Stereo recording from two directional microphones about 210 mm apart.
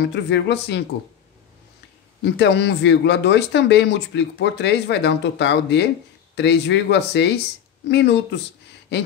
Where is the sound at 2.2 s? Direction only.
55° left (ahead or behind).